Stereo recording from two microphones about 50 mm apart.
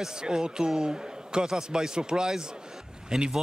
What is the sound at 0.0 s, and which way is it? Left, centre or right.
Speech, centre.